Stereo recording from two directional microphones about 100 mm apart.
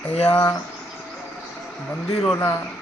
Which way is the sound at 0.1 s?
90° left.